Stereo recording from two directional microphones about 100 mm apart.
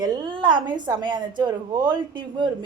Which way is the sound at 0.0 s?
50° right (ahead or behind).